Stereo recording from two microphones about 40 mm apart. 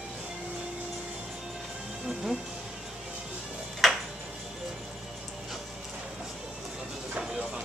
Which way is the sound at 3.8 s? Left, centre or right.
Centre.